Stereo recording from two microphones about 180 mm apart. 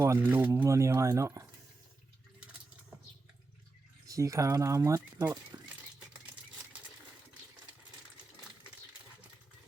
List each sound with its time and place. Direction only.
0.0 s speech: 15° right (ahead or behind)
4.0 s speech: 15° right (ahead or behind)